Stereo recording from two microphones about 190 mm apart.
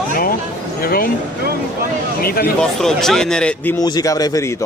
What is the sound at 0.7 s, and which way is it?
Speech, 50° left (ahead or behind).